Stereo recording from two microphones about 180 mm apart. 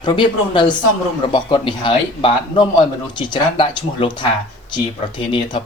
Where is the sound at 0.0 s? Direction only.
25° left (ahead or behind).